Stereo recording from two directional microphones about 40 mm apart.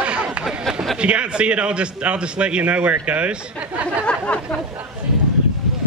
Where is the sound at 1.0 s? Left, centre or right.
Right.